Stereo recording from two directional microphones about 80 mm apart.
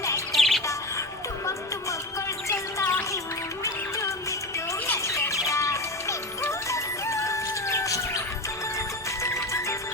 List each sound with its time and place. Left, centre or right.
0.3 s music: centre
2.5 s music: left
9.2 s music: left